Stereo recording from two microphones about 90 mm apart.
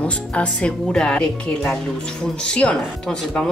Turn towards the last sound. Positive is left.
turn(degrees=10)  # may be behind; listen again after turning